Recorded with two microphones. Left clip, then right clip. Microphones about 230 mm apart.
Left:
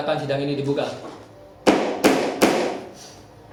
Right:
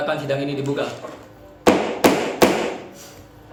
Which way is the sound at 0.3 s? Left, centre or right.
Centre.